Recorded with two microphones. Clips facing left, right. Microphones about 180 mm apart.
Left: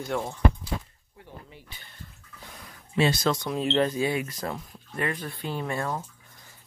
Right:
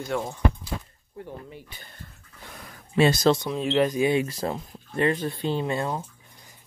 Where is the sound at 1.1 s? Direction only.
45° right (ahead or behind).